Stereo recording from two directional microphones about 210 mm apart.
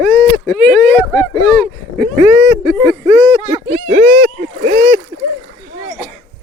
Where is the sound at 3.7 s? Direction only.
45° right (ahead or behind).